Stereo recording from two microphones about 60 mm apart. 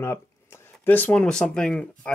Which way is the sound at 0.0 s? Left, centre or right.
Left.